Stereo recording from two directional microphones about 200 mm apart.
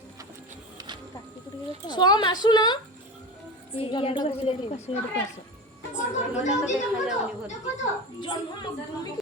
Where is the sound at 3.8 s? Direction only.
25° left (ahead or behind).